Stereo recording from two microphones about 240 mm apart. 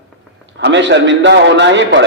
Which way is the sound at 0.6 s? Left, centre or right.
Right.